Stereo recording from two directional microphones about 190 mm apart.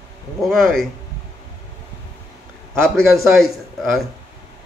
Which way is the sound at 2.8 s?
Centre (ahead or behind).